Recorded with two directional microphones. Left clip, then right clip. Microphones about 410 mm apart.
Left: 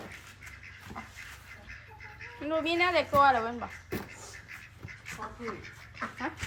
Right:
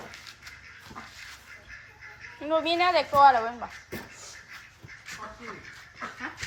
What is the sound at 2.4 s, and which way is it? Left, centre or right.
Speech, centre.